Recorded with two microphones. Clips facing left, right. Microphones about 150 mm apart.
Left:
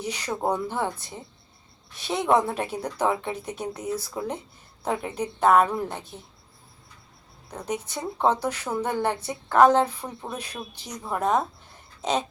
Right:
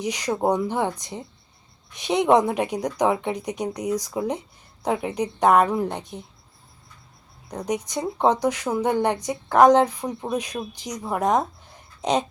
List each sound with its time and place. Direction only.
0.0 s a woman's voice: 15° right (ahead or behind)
7.5 s a woman's voice: 15° right (ahead or behind)